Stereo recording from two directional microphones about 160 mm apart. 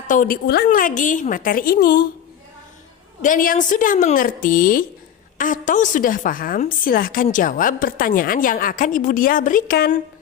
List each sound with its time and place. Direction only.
0.1 s a woman's voice: 55° left (ahead or behind)
0.4 s a woman's voice: 75° left (ahead or behind)
3.2 s a woman's voice: 55° left (ahead or behind)